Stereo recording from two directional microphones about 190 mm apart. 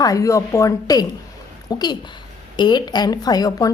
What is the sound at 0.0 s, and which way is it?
A woman's voice, 15° left (ahead or behind).